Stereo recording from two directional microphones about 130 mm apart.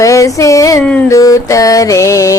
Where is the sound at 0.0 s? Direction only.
25° left (ahead or behind).